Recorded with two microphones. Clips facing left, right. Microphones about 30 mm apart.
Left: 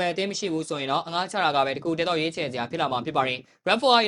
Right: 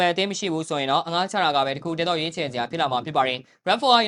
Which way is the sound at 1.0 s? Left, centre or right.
Right.